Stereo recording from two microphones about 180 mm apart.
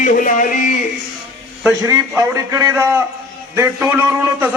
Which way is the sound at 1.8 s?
15° right (ahead or behind).